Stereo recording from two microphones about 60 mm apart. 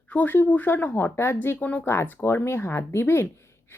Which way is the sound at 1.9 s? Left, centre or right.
Left.